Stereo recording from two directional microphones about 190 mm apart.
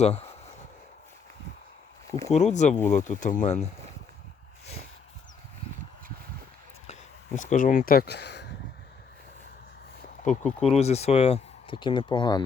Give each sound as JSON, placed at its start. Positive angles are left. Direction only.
{"t": 0.0, "sound": "speech", "side_deg": 35}
{"t": 2.0, "sound": "speech", "side_deg": 15}
{"t": 2.3, "sound": "speech", "side_deg": 35}
{"t": 6.8, "sound": "a sound", "side_deg": 40}
{"t": 10.4, "sound": "speech", "side_deg": 0}
{"t": 10.8, "sound": "speech", "side_deg": 35}